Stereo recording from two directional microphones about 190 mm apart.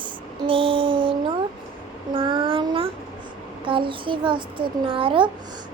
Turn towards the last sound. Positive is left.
turn(degrees=-25)  # may be behind; listen again after turning